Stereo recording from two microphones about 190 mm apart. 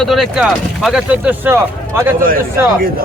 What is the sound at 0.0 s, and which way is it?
A man's voice, centre (ahead or behind).